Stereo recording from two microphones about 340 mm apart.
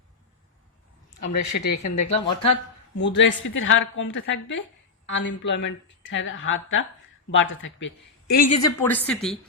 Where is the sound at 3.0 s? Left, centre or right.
Left.